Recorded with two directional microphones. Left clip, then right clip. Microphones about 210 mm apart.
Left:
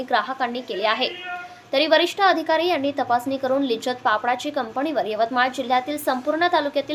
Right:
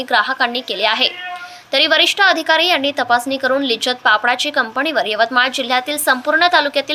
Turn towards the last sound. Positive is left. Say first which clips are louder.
# right 7 dB
turn(degrees=-5)  # may be behind; listen again after turning